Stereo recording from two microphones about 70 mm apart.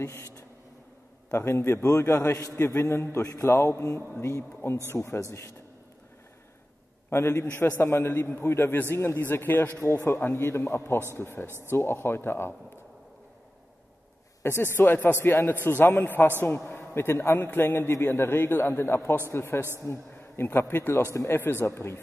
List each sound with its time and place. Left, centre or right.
1.3 s a man's voice: left
3.2 s a man's voice: left
7.1 s a man's voice: left
9.8 s a man's voice: left
11.4 s speech: right
11.7 s a man's voice: left
14.4 s a man's voice: left